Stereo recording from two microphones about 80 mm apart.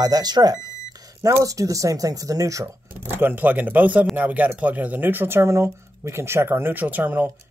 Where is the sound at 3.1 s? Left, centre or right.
Right.